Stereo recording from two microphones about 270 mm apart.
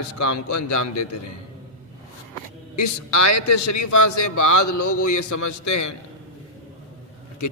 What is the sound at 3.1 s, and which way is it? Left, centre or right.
A man's voice, left.